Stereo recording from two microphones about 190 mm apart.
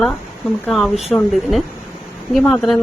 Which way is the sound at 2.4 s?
Centre (ahead or behind).